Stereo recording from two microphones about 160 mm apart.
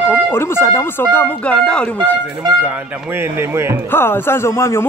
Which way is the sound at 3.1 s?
15° right (ahead or behind).